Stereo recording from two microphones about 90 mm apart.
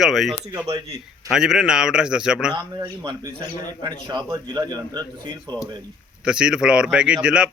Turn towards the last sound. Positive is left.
turn(degrees=-10)  # may be behind; listen again after turning